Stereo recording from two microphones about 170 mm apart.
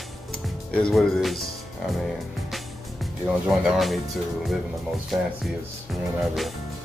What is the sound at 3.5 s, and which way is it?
Speech, centre (ahead or behind).